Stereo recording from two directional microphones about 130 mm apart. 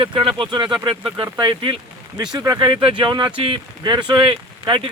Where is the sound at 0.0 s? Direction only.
45° right (ahead or behind).